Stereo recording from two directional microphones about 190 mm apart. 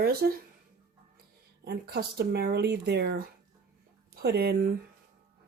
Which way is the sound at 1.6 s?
55° right (ahead or behind).